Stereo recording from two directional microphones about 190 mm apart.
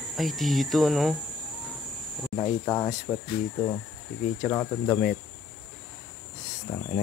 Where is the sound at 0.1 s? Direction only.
Centre (ahead or behind).